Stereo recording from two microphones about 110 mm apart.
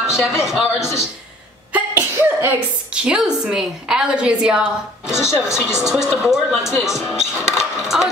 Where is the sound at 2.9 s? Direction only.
5° right (ahead or behind).